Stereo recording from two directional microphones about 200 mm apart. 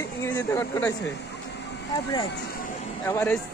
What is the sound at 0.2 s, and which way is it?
Speech, 10° left (ahead or behind).